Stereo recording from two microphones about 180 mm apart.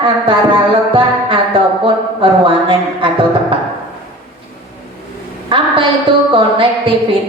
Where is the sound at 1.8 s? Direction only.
30° right (ahead or behind).